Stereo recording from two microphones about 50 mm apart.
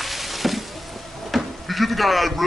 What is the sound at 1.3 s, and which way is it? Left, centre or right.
Sheep, centre.